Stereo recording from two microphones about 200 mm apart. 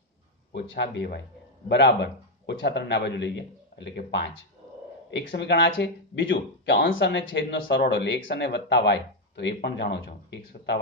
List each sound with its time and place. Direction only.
0.5 s speech: 60° left (ahead or behind)
6.6 s speech: 50° left (ahead or behind)
6.9 s speech: 70° left (ahead or behind)